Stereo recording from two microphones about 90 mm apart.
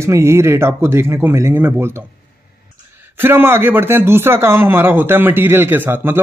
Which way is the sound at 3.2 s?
25° right (ahead or behind).